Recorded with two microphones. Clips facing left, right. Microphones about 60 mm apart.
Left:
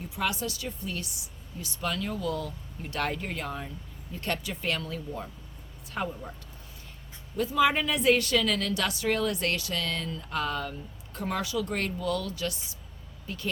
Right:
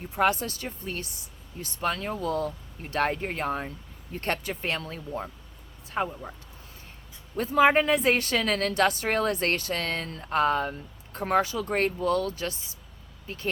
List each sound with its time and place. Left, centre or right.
0.1 s speech: right
7.3 s speech: right